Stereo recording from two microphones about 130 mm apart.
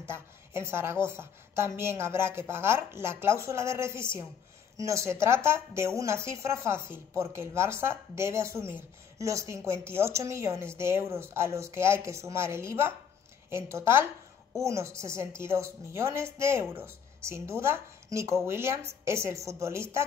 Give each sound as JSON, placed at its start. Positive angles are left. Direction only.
{"t": 0.0, "sound": "a woman's voice", "side_deg": -20}